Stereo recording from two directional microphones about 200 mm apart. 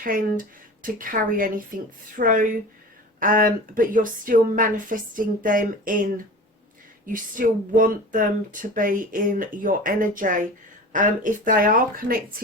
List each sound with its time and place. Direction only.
0.0 s speech: 45° right (ahead or behind)